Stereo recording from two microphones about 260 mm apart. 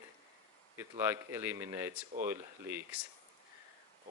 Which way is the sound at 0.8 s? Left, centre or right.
Centre.